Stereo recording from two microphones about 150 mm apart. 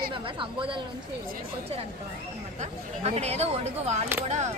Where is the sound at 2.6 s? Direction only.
45° right (ahead or behind).